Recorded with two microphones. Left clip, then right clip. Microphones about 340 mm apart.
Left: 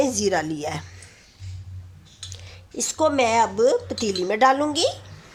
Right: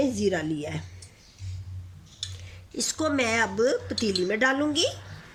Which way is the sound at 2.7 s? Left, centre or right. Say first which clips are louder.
Left 6 dB; centre.